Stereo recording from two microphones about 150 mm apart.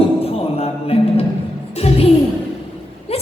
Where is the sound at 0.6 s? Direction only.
40° left (ahead or behind).